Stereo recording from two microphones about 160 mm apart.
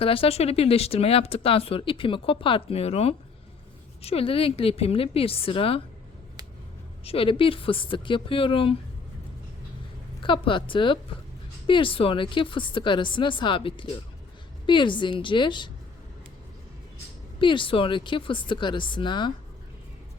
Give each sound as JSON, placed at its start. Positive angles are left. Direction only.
{"t": 0.0, "sound": "speech", "side_deg": 35}
{"t": 7.0, "sound": "speech", "side_deg": 35}
{"t": 10.2, "sound": "a woman's voice", "side_deg": 30}
{"t": 17.4, "sound": "speech", "side_deg": 30}